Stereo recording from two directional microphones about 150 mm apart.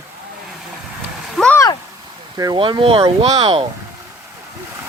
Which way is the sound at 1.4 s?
Centre (ahead or behind).